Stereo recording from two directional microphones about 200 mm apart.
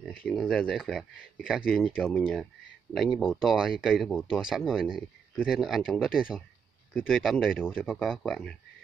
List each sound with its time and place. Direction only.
0.0 s speech: centre (ahead or behind)